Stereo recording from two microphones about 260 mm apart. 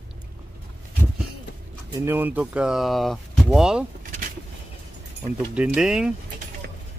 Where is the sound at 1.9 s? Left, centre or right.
Centre.